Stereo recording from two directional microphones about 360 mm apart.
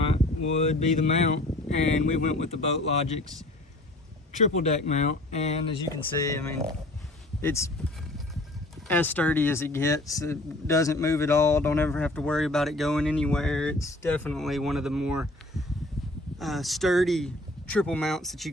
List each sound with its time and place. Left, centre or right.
0.6 s speech: centre
4.4 s speech: centre
8.9 s speech: centre